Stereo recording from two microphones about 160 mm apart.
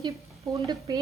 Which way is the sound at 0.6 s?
20° right (ahead or behind).